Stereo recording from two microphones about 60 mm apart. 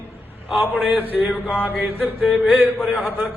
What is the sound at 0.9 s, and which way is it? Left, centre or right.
A man's voice, right.